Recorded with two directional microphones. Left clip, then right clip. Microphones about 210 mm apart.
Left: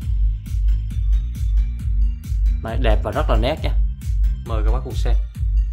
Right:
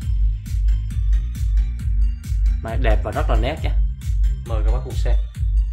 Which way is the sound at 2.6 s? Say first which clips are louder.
Left 1 dB; 15° left (ahead or behind).